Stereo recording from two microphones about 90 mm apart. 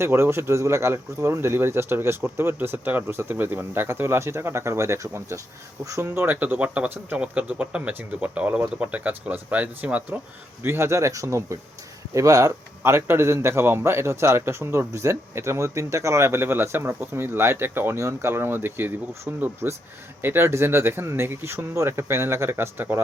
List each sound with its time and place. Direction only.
0.0 s a man's voice: 30° right (ahead or behind)
10.6 s a man's voice: 25° right (ahead or behind)